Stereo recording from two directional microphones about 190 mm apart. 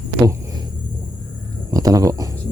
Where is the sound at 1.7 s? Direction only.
20° right (ahead or behind).